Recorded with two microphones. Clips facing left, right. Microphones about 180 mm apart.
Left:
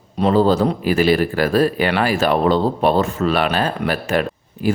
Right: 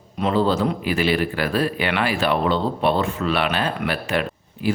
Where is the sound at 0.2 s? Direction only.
40° left (ahead or behind).